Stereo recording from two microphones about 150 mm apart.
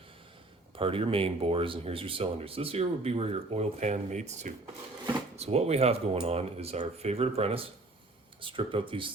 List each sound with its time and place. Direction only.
0.8 s speech: 40° right (ahead or behind)